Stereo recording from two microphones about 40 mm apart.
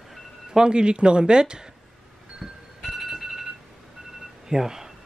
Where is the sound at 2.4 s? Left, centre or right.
Centre.